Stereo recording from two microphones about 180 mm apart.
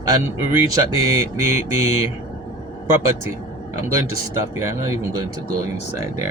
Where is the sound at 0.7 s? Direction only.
20° right (ahead or behind).